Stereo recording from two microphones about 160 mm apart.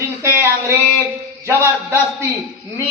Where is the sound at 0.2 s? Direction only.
15° right (ahead or behind).